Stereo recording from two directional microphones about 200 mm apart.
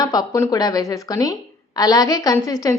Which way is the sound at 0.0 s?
20° left (ahead or behind).